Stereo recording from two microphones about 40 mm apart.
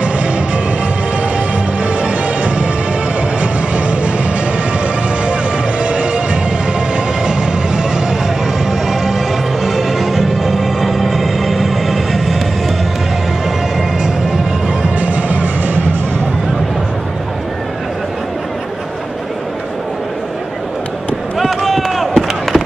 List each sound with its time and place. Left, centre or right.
1.8 s music: right
5.2 s music: right
7.2 s train: centre
9.6 s music: centre
15.0 s music: right
21.4 s a sound: centre